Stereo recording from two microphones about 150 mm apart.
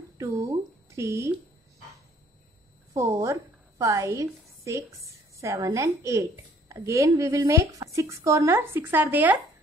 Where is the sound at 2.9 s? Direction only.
20° right (ahead or behind).